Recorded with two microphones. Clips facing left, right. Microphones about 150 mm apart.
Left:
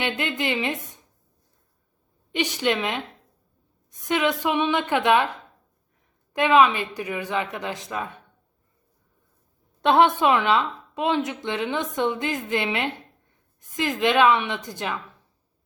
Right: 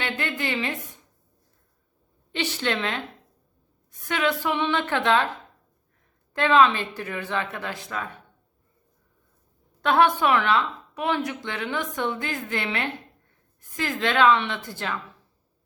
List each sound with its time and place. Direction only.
0.0 s a woman's voice: 20° left (ahead or behind)
2.3 s speech: 15° left (ahead or behind)
4.1 s speech: 20° left (ahead or behind)
6.3 s speech: 15° left (ahead or behind)
9.8 s a woman's voice: 20° left (ahead or behind)